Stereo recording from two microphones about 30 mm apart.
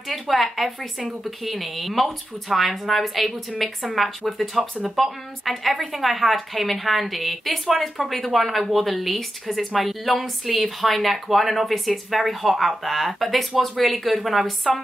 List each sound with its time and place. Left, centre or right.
0.1 s a woman's voice: centre
4.6 s speech: centre
4.9 s a woman's voice: centre